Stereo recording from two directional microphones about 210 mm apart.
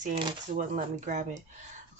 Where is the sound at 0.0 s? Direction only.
30° right (ahead or behind).